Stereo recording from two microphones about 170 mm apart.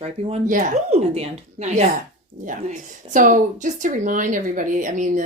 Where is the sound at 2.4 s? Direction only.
50° right (ahead or behind).